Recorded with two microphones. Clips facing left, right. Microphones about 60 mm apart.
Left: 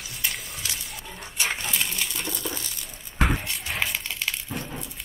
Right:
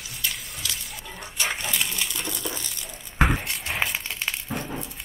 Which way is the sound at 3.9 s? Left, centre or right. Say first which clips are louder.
Even; right.